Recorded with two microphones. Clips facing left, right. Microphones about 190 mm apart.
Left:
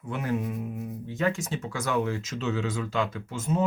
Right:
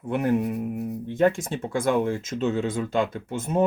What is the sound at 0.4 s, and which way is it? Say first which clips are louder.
Music: right 5 dB; 70° right (ahead or behind).